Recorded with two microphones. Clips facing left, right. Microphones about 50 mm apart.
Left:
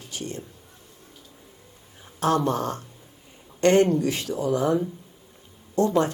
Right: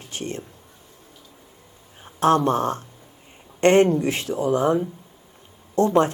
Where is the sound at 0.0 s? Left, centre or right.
Right.